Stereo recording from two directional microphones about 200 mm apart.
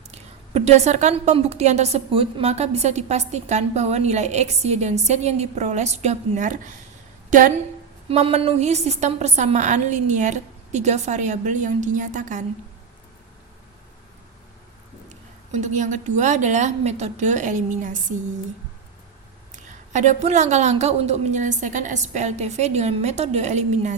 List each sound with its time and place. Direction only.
0.1 s a woman's voice: 35° right (ahead or behind)
8.1 s a woman's voice: 30° right (ahead or behind)
15.1 s a woman's voice: 35° right (ahead or behind)
19.5 s a woman's voice: 35° right (ahead or behind)